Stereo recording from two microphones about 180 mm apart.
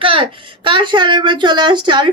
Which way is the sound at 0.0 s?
30° right (ahead or behind).